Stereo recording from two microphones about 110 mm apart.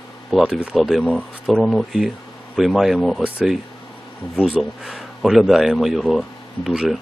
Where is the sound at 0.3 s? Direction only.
Centre (ahead or behind).